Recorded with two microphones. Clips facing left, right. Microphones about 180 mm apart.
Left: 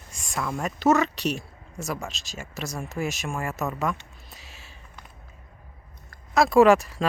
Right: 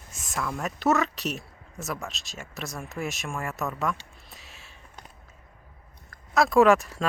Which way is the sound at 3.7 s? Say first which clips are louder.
Left 1 dB; centre (ahead or behind).